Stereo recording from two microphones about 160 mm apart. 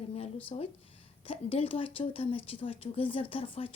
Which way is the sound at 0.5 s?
40° left (ahead or behind).